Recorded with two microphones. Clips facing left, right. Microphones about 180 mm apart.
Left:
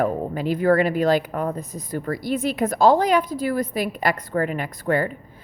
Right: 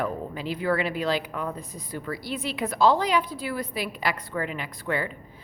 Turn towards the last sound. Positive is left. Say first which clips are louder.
# left 7 dB
turn(degrees=45)  # may be behind; listen again after turning